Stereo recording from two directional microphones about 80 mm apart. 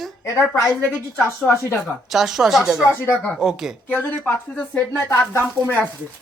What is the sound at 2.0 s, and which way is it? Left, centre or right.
Speech, centre.